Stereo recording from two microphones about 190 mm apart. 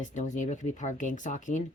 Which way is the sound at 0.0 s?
40° left (ahead or behind).